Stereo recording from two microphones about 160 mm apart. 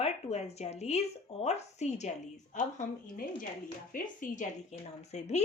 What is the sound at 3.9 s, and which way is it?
A woman's voice, 55° left (ahead or behind).